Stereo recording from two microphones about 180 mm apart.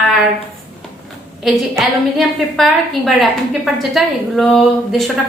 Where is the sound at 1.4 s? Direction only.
Centre (ahead or behind).